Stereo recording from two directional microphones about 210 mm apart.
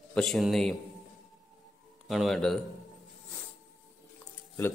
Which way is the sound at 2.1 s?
Centre (ahead or behind).